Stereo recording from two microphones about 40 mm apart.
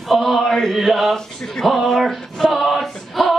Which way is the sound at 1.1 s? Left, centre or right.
Centre.